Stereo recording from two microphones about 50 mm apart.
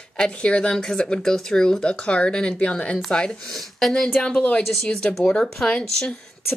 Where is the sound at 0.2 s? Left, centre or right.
Centre.